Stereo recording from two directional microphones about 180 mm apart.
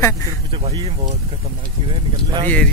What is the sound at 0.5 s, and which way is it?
Speech, 30° right (ahead or behind).